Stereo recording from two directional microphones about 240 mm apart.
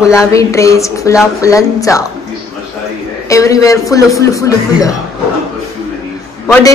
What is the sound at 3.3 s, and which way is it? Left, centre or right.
A man's voice, centre.